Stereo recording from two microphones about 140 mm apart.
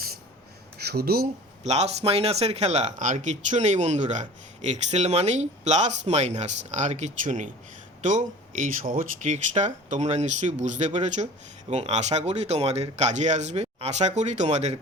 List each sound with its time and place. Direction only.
1.0 s speech: 90° right
1.6 s speech: 50° right (ahead or behind)
8.6 s speech: 80° right; by 14.8 s 55° right (ahead or behind)